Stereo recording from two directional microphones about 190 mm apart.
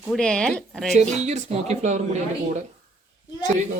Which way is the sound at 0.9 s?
35° right (ahead or behind).